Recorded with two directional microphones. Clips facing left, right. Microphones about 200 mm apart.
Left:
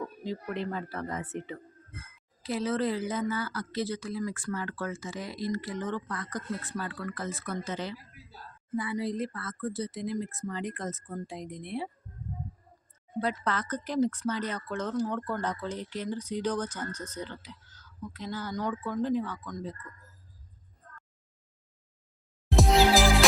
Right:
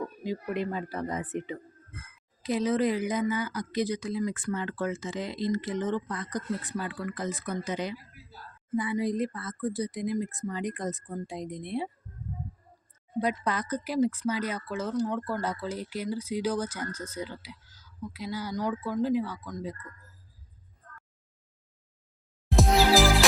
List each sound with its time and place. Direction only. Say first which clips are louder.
0.2 s speech: right 4 dB; 15° right (ahead or behind)
13.1 s speech: right 2 dB; 15° right (ahead or behind)
22.4 s music: even; centre (ahead or behind)